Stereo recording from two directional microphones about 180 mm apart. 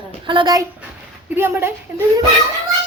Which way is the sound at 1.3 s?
15° right (ahead or behind).